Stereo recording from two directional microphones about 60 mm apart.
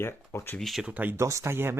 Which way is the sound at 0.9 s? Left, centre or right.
Right.